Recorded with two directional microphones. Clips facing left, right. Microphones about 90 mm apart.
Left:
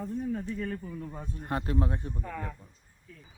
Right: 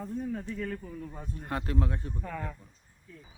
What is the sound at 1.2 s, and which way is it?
Speech, 25° left (ahead or behind).